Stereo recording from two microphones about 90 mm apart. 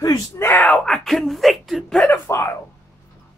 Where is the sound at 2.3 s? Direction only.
30° left (ahead or behind).